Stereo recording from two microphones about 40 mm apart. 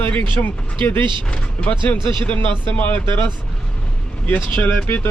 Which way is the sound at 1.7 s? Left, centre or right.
Left.